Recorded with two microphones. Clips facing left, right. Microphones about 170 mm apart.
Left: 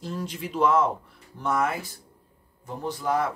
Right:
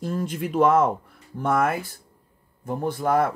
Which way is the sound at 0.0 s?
50° right (ahead or behind).